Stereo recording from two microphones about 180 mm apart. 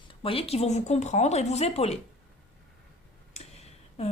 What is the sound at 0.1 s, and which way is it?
A woman's voice, 30° left (ahead or behind).